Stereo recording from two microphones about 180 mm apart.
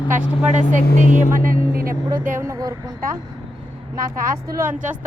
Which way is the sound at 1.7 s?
55° right (ahead or behind).